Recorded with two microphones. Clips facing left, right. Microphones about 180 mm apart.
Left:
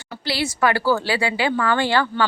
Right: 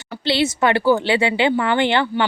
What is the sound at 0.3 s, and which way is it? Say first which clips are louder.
Speech: right 3 dB; 25° right (ahead or behind).